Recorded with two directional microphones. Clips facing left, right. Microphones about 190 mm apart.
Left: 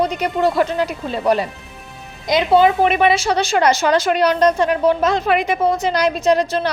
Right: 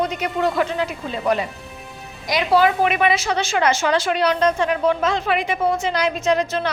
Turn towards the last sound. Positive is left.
turn(degrees=35)  # may be behind; listen again after turning